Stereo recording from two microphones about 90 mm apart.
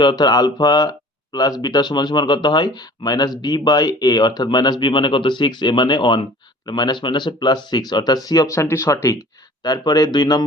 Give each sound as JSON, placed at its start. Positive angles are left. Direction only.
{"t": 0.0, "sound": "speech", "side_deg": 55}
{"t": 8.5, "sound": "speech", "side_deg": 30}
{"t": 9.6, "sound": "speech", "side_deg": 50}